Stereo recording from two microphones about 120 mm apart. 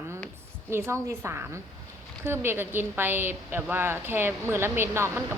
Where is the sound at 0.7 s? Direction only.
20° right (ahead or behind).